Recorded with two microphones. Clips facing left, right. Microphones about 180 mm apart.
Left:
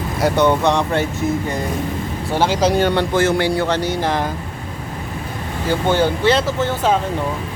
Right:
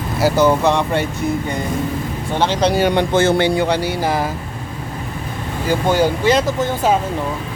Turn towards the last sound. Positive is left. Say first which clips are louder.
# right 1 dB
turn(degrees=-10)  # may be behind; listen again after turning